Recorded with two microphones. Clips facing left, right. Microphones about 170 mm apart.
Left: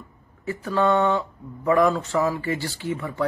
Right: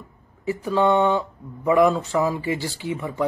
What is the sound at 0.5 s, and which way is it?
A man's voice, 15° right (ahead or behind).